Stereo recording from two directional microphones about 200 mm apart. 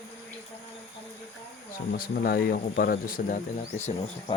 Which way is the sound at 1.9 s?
50° left (ahead or behind).